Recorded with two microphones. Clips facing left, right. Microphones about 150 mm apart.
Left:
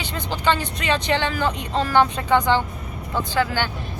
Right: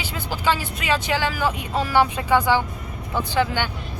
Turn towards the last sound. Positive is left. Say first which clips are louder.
# even
turn(degrees=-15)  # may be behind; listen again after turning